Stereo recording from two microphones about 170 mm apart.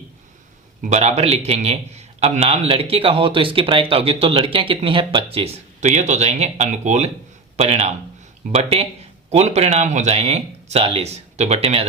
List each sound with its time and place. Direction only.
0.8 s a man's voice: 40° right (ahead or behind)